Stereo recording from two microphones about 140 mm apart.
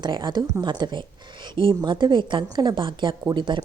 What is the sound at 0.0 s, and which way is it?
A woman's voice, 35° right (ahead or behind).